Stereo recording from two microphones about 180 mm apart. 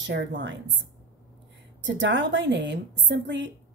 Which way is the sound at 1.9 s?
90° right.